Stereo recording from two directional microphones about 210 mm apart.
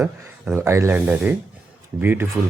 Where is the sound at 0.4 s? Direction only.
15° right (ahead or behind).